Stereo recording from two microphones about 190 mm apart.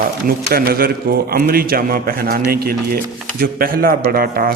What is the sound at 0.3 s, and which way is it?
A man's voice, 55° right (ahead or behind).